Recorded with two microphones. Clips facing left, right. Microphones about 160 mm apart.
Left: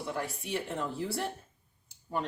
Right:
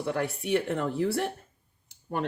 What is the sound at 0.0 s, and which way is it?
Speech, 65° right (ahead or behind).